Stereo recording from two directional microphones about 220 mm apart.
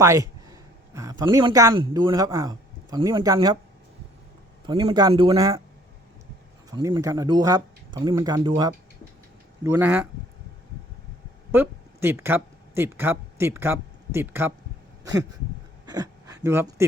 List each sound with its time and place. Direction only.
0.0 s speech: 15° right (ahead or behind)
4.6 s speech: 20° right (ahead or behind)
6.7 s speech: 20° right (ahead or behind)
11.5 s speech: 10° right (ahead or behind)
15.9 s gasp: 15° right (ahead or behind)